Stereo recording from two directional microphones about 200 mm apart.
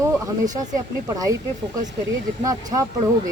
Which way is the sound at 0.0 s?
20° right (ahead or behind).